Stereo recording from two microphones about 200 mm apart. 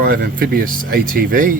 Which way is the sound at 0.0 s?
50° right (ahead or behind).